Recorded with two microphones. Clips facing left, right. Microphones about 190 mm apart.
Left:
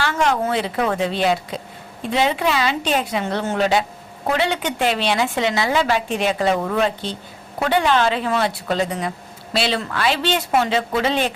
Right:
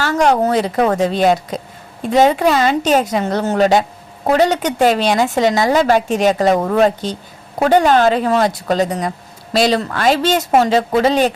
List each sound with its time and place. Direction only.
0.0 s a woman's voice: 40° right (ahead or behind)